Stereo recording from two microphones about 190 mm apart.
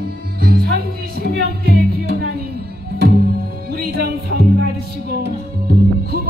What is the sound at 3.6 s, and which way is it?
Music, 50° right (ahead or behind).